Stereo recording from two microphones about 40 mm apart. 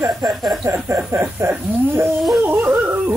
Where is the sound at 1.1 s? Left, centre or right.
Right.